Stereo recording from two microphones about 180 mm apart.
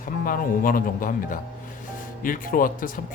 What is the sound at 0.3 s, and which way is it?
Speech, 50° left (ahead or behind).